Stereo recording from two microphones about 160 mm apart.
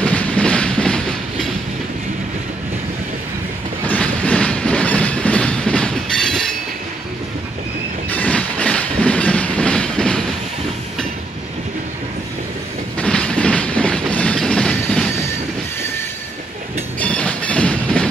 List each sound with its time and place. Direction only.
0.0 s train: 10° left (ahead or behind)
3.8 s train: 10° left (ahead or behind)
8.1 s train: 10° left (ahead or behind)
12.9 s train: 5° left (ahead or behind)
17.0 s train: 10° left (ahead or behind)